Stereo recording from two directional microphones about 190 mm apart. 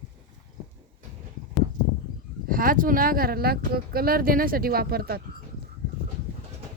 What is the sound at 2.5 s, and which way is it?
Speech, 50° right (ahead or behind).